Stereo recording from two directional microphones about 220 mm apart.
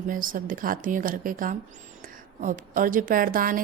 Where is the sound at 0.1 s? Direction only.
40° right (ahead or behind).